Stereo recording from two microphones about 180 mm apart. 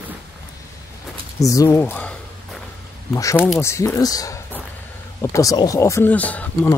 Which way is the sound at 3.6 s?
15° left (ahead or behind).